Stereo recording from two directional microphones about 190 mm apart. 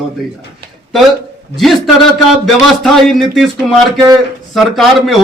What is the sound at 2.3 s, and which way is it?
A man's voice, centre (ahead or behind).